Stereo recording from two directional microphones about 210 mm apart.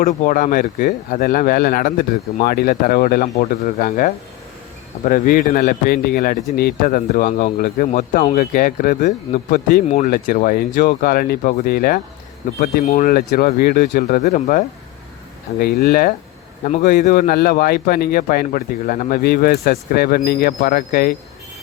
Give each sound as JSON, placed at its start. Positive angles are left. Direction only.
{"t": 0.0, "sound": "speech", "side_deg": 40}
{"t": 15.6, "sound": "a man's voice", "side_deg": 45}